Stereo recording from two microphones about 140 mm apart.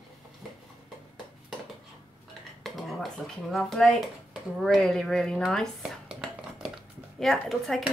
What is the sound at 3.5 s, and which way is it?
Speech, centre (ahead or behind).